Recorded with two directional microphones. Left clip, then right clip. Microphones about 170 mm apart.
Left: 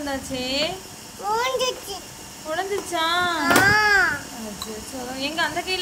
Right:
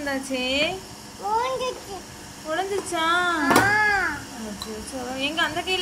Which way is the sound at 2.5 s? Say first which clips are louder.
Left 1 dB; 15° left (ahead or behind).